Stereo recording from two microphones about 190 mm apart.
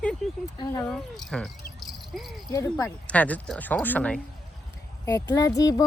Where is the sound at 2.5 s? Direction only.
15° left (ahead or behind).